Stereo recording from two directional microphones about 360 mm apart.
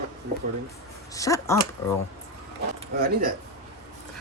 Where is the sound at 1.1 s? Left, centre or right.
Centre.